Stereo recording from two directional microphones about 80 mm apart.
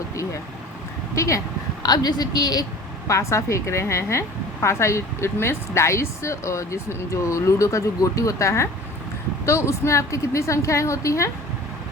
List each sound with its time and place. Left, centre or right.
1.1 s speech: left
1.8 s a woman's voice: left
3.1 s a woman's voice: left